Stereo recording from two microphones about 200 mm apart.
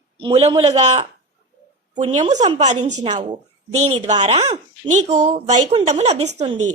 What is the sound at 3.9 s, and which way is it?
Speech, 30° right (ahead or behind).